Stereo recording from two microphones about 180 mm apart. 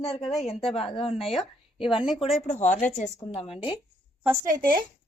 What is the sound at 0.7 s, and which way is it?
Speech, 30° left (ahead or behind).